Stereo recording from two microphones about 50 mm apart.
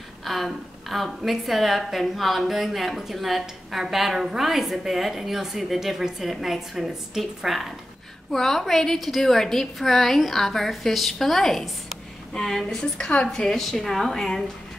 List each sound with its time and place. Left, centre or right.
0.2 s a woman's voice: centre; by 13.5 s left
13.5 s a woman's voice: centre